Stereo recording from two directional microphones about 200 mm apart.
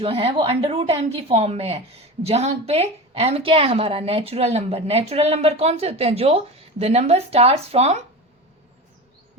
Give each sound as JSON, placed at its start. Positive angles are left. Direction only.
{"t": 0.0, "sound": "a woman's voice", "side_deg": -30}